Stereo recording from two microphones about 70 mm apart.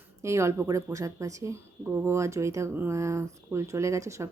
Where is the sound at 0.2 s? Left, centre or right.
Right.